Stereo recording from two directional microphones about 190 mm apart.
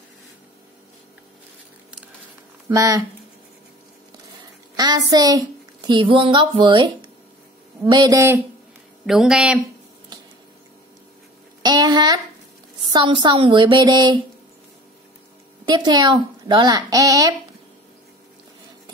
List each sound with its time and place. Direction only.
2.7 s a man's voice: 15° right (ahead or behind)
4.7 s a woman's voice: 20° right (ahead or behind)
9.0 s speech: centre (ahead or behind)
11.6 s a sound: 20° right (ahead or behind)
12.8 s a woman's voice: 25° right (ahead or behind)
15.6 s a woman's voice: 20° right (ahead or behind)